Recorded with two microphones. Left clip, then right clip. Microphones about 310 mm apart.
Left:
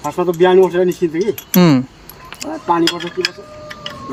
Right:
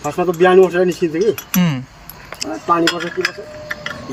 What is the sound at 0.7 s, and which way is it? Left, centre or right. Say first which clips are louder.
Speech: even; centre.